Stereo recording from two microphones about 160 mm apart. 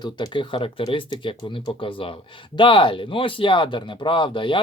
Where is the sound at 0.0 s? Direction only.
25° left (ahead or behind).